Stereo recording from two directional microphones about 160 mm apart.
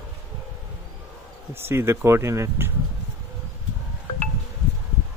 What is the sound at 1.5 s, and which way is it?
Speech, 15° right (ahead or behind).